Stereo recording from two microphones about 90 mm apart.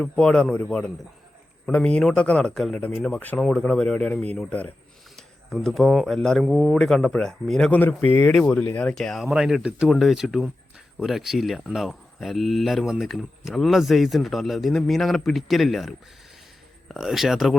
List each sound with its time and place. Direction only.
0.0 s speech: 10° left (ahead or behind)
5.1 s speech: centre (ahead or behind)
7.7 s speech: 20° left (ahead or behind)
8.4 s speech: 15° left (ahead or behind)
9.2 s speech: 5° right (ahead or behind)